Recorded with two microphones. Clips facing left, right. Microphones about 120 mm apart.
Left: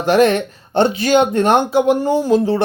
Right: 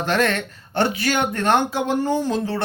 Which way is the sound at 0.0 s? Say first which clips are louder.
Left 8 dB; 15° left (ahead or behind).